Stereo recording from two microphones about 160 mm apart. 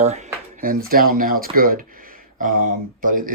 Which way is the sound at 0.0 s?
45° right (ahead or behind).